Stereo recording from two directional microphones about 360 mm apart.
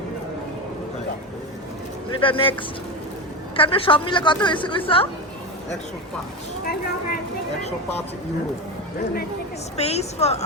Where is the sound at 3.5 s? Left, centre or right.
Centre.